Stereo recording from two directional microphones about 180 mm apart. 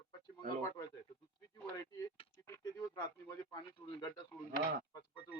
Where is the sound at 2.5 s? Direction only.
20° left (ahead or behind).